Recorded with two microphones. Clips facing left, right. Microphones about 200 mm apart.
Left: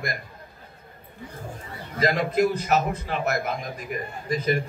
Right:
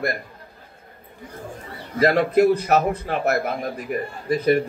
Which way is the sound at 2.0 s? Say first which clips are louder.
Right 5 dB; 65° right (ahead or behind).